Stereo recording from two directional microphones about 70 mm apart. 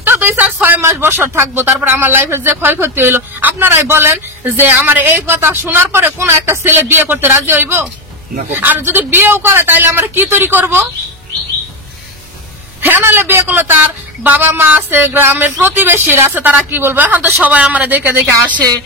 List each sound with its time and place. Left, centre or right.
0.0 s speech: right
12.8 s speech: right
18.3 s speech: right